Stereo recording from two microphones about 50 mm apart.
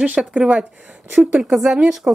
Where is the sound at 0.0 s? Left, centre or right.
Right.